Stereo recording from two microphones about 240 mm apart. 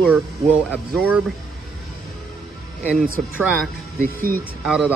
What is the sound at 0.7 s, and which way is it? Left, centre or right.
Speech, centre.